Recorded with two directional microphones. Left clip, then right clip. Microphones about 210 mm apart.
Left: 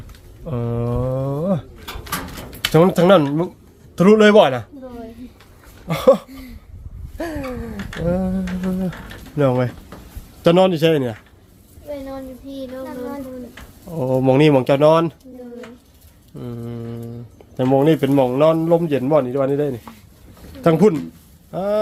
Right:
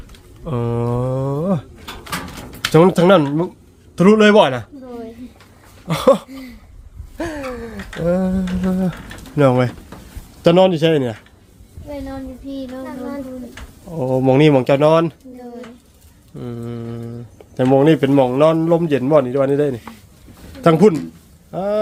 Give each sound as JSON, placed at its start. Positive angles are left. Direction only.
{"t": 0.4, "sound": "a sound", "side_deg": -15}
{"t": 2.7, "sound": "speech", "side_deg": -5}
{"t": 5.9, "sound": "a sound", "side_deg": -15}
{"t": 9.3, "sound": "speech", "side_deg": -20}
{"t": 10.4, "sound": "speech", "side_deg": 0}
{"t": 13.9, "sound": "speech", "side_deg": 0}
{"t": 16.4, "sound": "speech", "side_deg": -10}
{"t": 21.5, "sound": "speech", "side_deg": 0}